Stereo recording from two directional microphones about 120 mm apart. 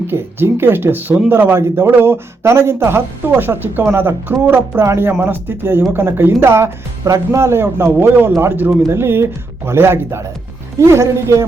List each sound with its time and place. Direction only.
0.1 s speech: 20° right (ahead or behind)